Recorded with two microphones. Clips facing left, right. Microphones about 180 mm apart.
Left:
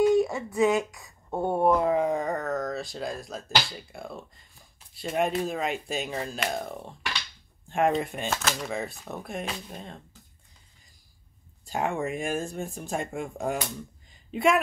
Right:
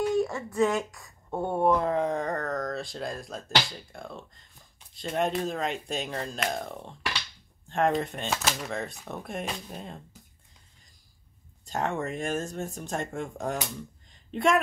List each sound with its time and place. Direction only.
0.1 s speech: 10° left (ahead or behind)
11.6 s speech: 10° left (ahead or behind)
14.1 s a sound: 5° left (ahead or behind)